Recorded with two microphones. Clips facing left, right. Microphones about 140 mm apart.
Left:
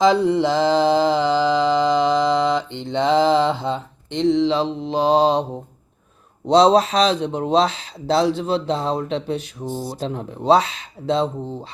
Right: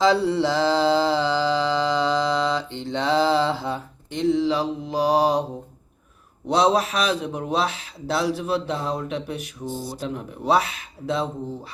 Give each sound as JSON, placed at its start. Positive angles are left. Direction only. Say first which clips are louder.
{"t": 0.0, "sound": "mantra", "louder": "left 3 dB", "side_deg": 20}
{"t": 6.5, "sound": "speech", "louder": "left 6 dB", "side_deg": 30}